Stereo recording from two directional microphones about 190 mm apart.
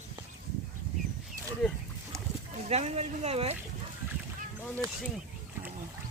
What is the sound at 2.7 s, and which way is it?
Speech, 35° right (ahead or behind).